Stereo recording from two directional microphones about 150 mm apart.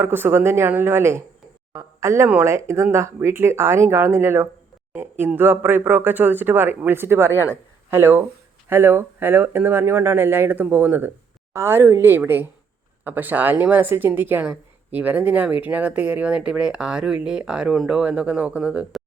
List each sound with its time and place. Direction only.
0.0 s a woman's voice: 15° right (ahead or behind)